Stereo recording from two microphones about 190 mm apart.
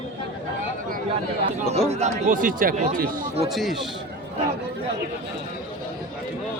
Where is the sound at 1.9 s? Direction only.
40° right (ahead or behind).